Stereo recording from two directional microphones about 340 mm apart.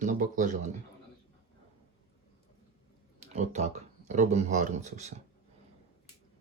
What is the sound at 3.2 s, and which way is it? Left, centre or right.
Speech, centre.